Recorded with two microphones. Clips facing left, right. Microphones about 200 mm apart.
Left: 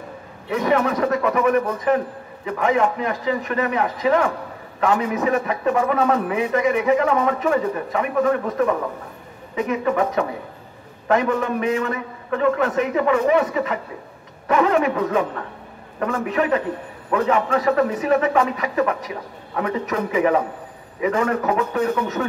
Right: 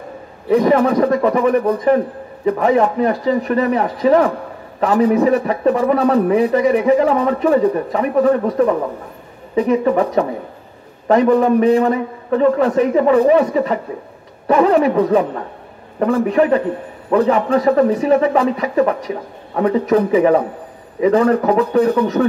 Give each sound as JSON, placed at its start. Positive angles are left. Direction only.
{"t": 0.5, "sound": "a man's voice", "side_deg": -35}